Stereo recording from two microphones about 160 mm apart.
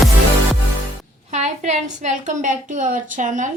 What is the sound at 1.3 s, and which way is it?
A woman's voice, 45° right (ahead or behind).